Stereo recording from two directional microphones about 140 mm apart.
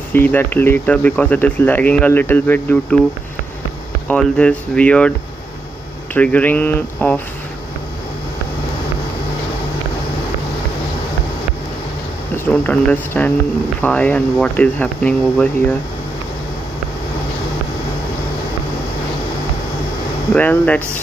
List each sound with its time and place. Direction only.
0.1 s speech: 15° left (ahead or behind)
4.1 s speech: 10° left (ahead or behind)
6.1 s speech: 10° left (ahead or behind)
12.4 s speech: 10° left (ahead or behind)
20.3 s speech: 10° left (ahead or behind)